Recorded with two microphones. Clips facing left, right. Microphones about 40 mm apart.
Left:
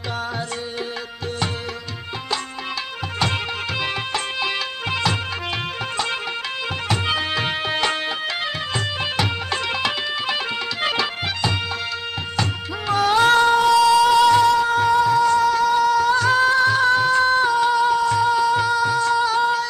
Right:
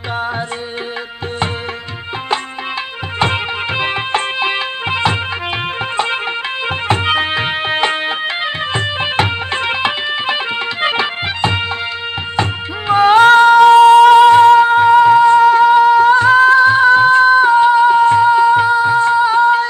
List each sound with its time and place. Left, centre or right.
3.2 s music: right
6.9 s music: right